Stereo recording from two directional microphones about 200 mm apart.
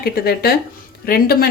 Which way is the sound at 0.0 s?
50° left (ahead or behind).